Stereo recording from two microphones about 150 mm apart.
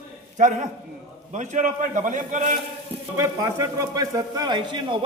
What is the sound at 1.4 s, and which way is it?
A man's voice, 55° right (ahead or behind).